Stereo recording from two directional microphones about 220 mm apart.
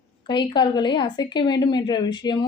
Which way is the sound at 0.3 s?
20° left (ahead or behind).